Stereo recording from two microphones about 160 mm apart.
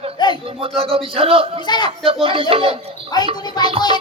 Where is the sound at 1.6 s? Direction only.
30° left (ahead or behind).